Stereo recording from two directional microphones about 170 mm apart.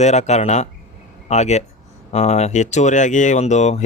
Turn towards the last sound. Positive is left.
turn(degrees=45)  # may be behind; listen again after turning